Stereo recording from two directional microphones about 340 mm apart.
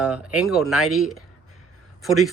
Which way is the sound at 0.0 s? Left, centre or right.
Centre.